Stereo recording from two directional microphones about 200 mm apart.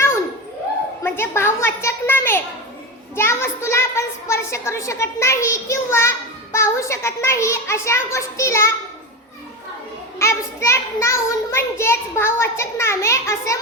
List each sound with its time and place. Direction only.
1.0 s a child's voice: 10° left (ahead or behind)
10.2 s a child's voice: 15° left (ahead or behind)